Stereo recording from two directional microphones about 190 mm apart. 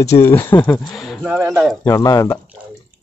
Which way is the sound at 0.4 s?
10° left (ahead or behind).